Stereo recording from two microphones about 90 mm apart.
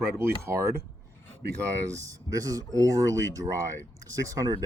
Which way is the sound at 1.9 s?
40° right (ahead or behind).